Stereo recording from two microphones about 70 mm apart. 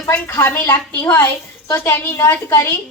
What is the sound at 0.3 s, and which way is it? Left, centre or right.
A woman's voice, left.